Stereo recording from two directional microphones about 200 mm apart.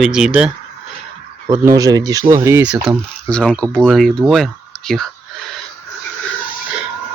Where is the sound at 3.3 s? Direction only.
5° left (ahead or behind).